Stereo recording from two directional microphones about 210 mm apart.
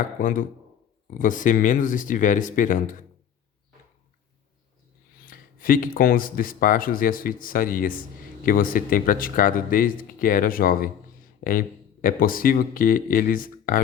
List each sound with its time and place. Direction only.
0.2 s speech: 40° left (ahead or behind)
5.1 s speech: 40° left (ahead or behind)